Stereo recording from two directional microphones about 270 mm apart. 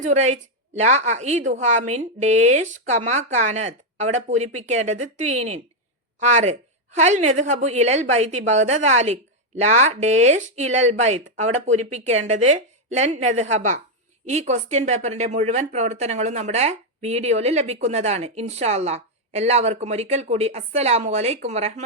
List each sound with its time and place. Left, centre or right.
0.0 s speech: right